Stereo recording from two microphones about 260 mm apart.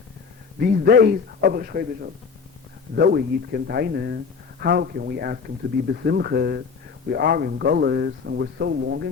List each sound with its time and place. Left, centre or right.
0.6 s a man's voice: right
2.9 s a man's voice: right